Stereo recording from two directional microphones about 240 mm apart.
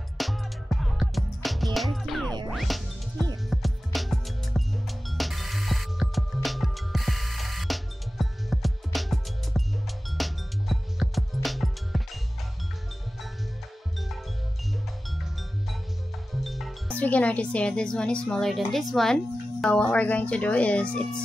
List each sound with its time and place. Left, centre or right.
0.2 s music: centre
16.3 s speech: centre